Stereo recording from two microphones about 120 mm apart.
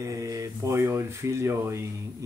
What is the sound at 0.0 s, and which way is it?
Speech, 25° right (ahead or behind).